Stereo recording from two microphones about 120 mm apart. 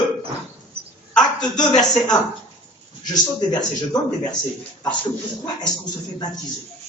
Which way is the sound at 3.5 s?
35° left (ahead or behind).